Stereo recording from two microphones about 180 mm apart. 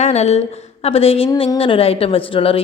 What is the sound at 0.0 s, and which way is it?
A woman's voice, 40° left (ahead or behind).